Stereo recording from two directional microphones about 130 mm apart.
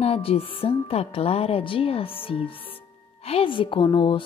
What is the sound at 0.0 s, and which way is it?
A woman's voice, 50° left (ahead or behind).